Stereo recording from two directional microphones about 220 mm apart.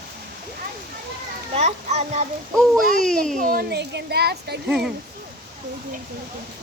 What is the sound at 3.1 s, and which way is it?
Speech, 5° left (ahead or behind).